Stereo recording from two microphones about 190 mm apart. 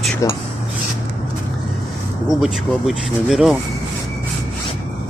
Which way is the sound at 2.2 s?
Centre (ahead or behind).